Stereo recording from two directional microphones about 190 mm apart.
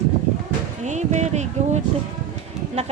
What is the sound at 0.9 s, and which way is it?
Speech, 40° right (ahead or behind).